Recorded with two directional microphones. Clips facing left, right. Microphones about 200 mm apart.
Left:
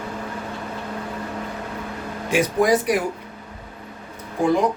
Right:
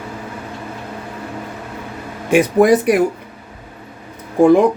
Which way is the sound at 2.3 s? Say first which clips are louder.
Right 7 dB; 55° right (ahead or behind).